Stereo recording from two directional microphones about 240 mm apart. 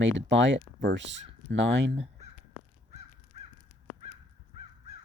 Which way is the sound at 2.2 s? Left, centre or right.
Right.